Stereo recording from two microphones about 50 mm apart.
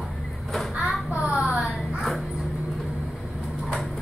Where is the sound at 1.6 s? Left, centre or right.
Centre.